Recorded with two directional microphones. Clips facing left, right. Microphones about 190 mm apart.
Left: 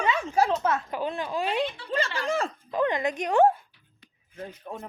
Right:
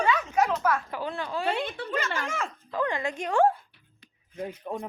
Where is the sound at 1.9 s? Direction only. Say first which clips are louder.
Left 3 dB; 35° left (ahead or behind).